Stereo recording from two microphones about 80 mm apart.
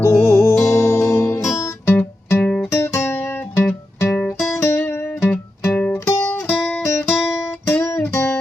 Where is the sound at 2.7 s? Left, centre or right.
Left.